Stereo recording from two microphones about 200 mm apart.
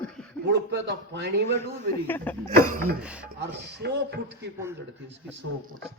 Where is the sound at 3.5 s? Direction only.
55° right (ahead or behind).